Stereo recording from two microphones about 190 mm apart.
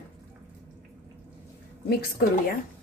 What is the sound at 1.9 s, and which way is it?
Speech, 55° left (ahead or behind).